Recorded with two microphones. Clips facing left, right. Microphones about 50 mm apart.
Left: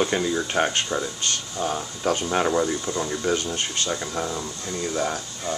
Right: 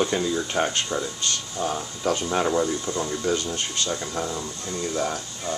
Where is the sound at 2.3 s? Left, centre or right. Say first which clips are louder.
Left 1 dB; centre.